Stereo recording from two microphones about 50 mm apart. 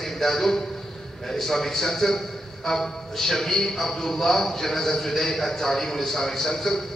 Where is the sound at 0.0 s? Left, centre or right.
Centre.